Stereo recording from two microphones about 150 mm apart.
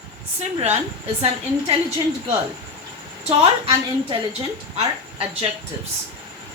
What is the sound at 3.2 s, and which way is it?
A woman's voice, 40° right (ahead or behind).